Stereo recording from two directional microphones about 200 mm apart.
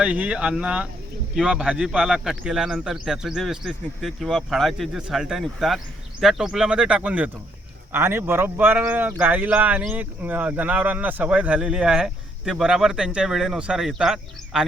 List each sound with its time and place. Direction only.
0.0 s speech: 5° right (ahead or behind)